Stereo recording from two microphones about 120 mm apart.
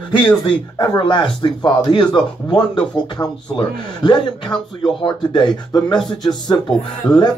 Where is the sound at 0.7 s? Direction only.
35° left (ahead or behind).